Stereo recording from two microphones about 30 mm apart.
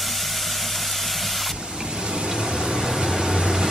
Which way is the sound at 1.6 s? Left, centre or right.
Right.